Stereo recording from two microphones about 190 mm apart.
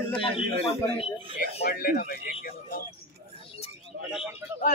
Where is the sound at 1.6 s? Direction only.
50° left (ahead or behind).